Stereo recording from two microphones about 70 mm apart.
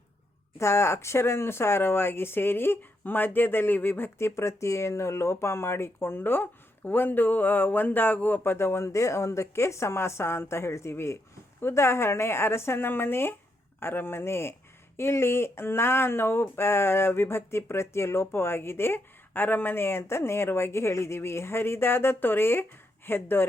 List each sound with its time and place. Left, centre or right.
0.6 s speech: left
8.5 s speech: left